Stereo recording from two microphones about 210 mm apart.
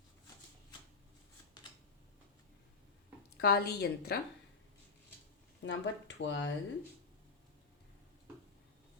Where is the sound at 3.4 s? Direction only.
50° left (ahead or behind).